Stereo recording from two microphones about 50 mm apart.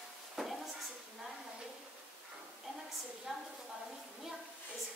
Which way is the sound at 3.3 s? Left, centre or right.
Centre.